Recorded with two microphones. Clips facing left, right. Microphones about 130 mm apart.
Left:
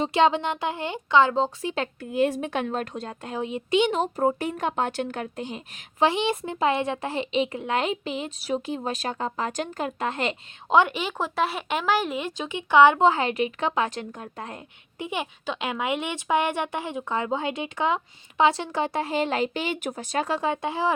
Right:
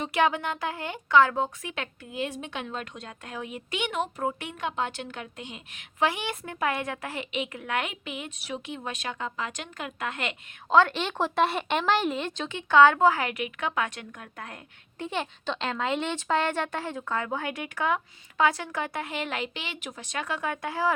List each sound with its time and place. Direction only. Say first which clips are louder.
0.0 s speech: left 4 dB; 25° left (ahead or behind)
2.1 s a woman's voice: left 9 dB; 50° left (ahead or behind); by 10.3 s 30° left (ahead or behind)
10.7 s a woman's voice: left 1 dB; 15° left (ahead or behind)
14.9 s speech: left 1 dB; 15° left (ahead or behind)